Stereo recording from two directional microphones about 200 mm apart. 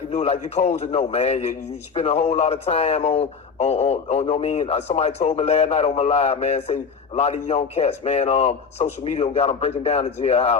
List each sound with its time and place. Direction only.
0.1 s speech: 35° left (ahead or behind)